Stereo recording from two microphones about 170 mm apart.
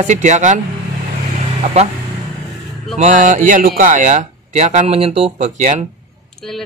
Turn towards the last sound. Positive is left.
turn(degrees=0)  # may be behind; listen again after turning